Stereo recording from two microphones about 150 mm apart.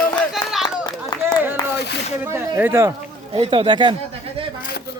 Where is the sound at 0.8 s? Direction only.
25° left (ahead or behind).